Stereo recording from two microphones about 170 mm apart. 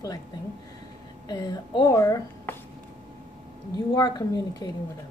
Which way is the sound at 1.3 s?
25° left (ahead or behind).